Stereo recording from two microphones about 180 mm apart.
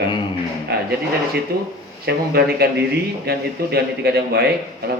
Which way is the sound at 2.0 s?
60° right (ahead or behind).